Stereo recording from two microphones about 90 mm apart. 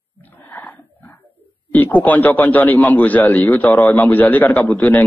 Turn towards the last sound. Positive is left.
turn(degrees=15)  # may be behind; listen again after turning